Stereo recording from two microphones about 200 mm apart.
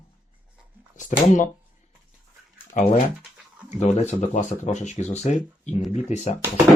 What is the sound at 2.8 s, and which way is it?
Speech, 40° left (ahead or behind).